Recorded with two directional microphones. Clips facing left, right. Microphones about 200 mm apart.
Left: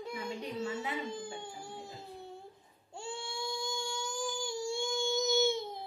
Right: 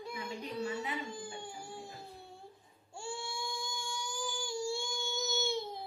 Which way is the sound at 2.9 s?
20° left (ahead or behind).